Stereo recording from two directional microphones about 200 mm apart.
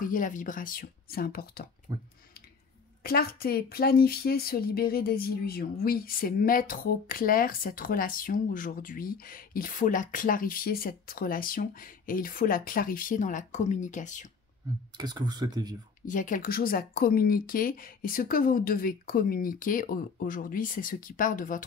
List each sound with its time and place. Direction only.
0.0 s speech: 40° left (ahead or behind)
1.9 s speech: 20° right (ahead or behind)
3.0 s speech: 50° left (ahead or behind)
15.0 s speech: 20° right (ahead or behind)
16.1 s speech: 40° left (ahead or behind)